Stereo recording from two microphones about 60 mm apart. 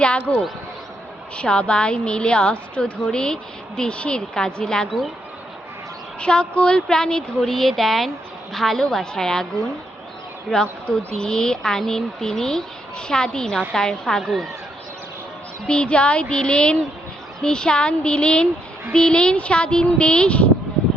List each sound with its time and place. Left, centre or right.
0.0 s speech: centre
1.4 s a woman's voice: centre
6.1 s a woman's voice: centre
10.5 s a woman's voice: centre
15.6 s a woman's voice: centre